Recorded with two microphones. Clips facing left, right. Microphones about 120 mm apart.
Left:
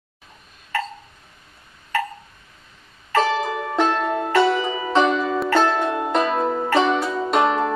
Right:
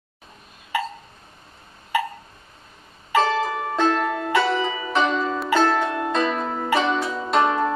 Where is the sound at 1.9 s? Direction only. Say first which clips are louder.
Right 1 dB; 10° right (ahead or behind).